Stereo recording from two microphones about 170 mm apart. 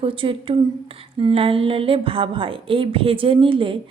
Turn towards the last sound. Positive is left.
turn(degrees=-30)  # may be behind; listen again after turning